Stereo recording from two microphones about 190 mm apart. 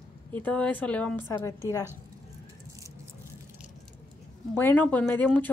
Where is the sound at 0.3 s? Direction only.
5° left (ahead or behind).